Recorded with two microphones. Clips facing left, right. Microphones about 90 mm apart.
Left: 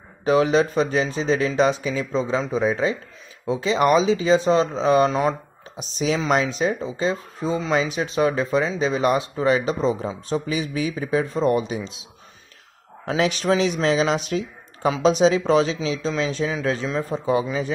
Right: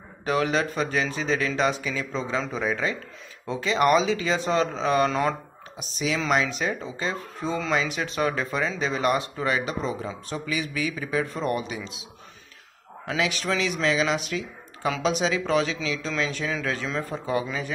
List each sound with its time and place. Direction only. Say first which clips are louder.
0.2 s speech: left 6 dB; 25° left (ahead or behind)